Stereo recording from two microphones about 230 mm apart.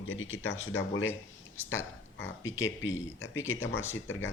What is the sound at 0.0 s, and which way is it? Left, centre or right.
Speech, left.